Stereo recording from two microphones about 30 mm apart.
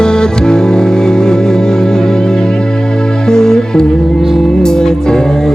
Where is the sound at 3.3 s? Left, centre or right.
Left.